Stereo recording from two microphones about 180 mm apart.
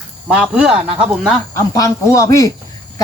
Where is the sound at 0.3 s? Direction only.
5° right (ahead or behind).